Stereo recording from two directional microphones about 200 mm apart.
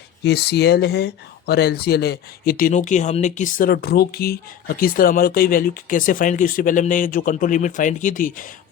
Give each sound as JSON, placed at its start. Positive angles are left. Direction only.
{"t": 0.3, "sound": "speech", "side_deg": 55}